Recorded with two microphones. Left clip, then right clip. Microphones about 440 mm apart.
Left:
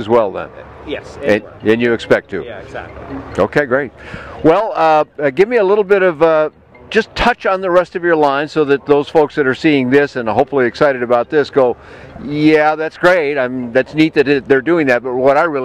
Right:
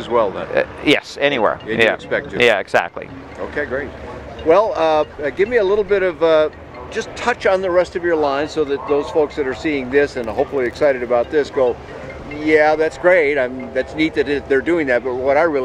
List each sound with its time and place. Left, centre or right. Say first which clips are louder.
0.0 s speech: left 4 dB; left
1.7 s speech: left 4 dB; left
2.4 s speech: right 13 dB; right
3.3 s speech: left 9 dB; left